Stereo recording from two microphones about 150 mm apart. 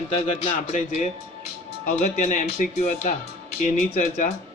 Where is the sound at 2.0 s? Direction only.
50° left (ahead or behind).